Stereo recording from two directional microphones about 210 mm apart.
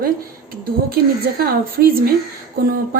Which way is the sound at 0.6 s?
45° right (ahead or behind).